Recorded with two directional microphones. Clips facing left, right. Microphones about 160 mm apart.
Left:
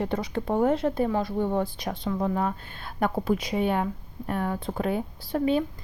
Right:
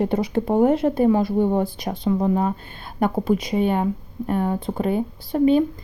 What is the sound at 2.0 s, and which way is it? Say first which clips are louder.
Speech: right 7 dB; 20° right (ahead or behind).